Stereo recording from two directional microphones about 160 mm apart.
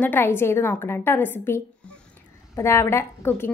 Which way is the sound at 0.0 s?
15° left (ahead or behind).